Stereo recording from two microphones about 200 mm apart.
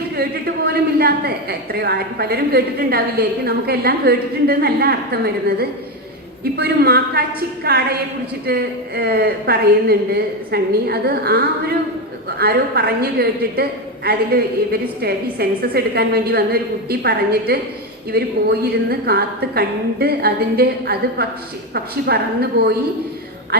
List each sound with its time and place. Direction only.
0.2 s a woman's voice: 50° right (ahead or behind)